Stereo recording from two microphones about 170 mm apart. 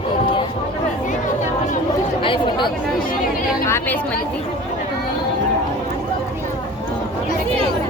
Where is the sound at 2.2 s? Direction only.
30° left (ahead or behind).